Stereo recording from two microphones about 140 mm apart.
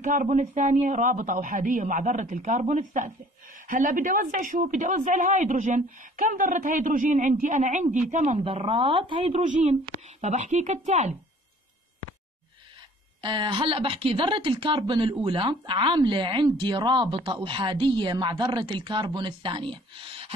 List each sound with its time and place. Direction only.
0.0 s speech: 60° right (ahead or behind)
3.6 s speech: 75° right (ahead or behind); by 9.4 s 40° right (ahead or behind)
9.4 s speech: 55° right (ahead or behind)
13.2 s speech: 35° right (ahead or behind)